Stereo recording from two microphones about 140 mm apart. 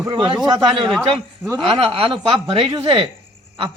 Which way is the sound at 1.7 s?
45° right (ahead or behind).